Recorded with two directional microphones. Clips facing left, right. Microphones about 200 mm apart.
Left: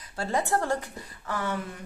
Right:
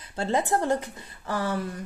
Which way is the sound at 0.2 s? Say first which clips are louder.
Right 2 dB; 20° right (ahead or behind).